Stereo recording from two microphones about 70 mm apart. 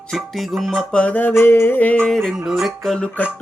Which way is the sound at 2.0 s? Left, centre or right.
Centre.